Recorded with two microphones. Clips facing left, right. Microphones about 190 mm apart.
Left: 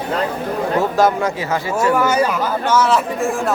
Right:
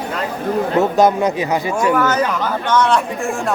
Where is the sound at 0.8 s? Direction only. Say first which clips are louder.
Right 2 dB; 20° right (ahead or behind).